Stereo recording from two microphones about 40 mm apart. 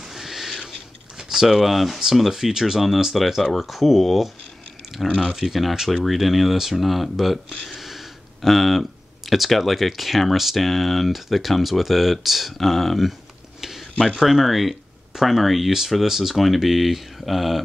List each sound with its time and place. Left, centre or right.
0.0 s rodents: centre
1.1 s speech: centre
5.0 s speech: left
5.3 s speech: centre
13.6 s a sound: centre
14.1 s speech: centre